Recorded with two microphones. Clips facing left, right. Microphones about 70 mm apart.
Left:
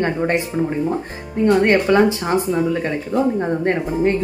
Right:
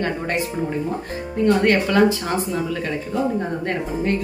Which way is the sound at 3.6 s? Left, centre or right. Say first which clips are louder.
Left 6 dB; left.